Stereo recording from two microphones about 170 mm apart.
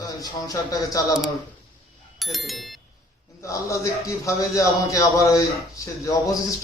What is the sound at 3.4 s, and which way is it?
A man's voice, 20° left (ahead or behind).